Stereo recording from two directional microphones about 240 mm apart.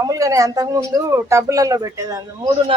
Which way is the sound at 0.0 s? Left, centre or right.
Centre.